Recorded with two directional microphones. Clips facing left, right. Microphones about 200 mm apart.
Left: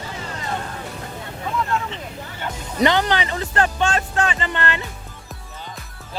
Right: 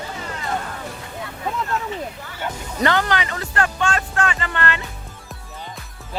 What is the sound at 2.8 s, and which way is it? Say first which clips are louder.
Speech: left 2 dB; 20° left (ahead or behind).